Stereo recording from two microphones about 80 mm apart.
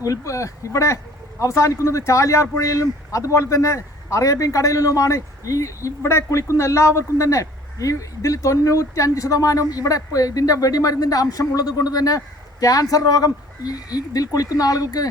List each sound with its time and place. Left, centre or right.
0.0 s speech: left